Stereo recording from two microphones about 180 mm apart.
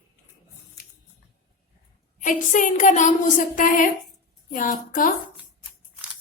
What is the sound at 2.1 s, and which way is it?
A woman's voice, 45° left (ahead or behind).